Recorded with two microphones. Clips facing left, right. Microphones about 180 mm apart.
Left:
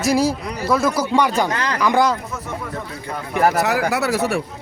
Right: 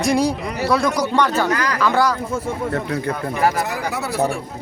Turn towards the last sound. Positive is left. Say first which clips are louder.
# left 2 dB
turn(degrees=75)  # may be behind; listen again after turning